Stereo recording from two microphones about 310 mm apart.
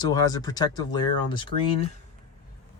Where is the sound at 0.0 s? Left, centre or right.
Centre.